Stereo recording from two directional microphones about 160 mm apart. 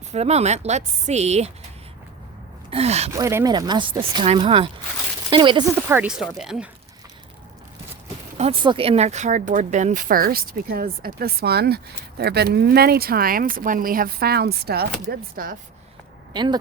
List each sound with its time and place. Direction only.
0.1 s speech: 40° right (ahead or behind)
2.6 s speech: 40° right (ahead or behind)
3.1 s speech: 15° right (ahead or behind)
5.9 s speech: 5° right (ahead or behind)
8.6 s speech: 35° right (ahead or behind); by 15.5 s 70° right (ahead or behind)
16.3 s speech: 30° right (ahead or behind)